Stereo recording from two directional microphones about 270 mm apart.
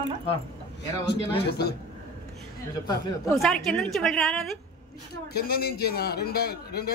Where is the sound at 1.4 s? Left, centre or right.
Left.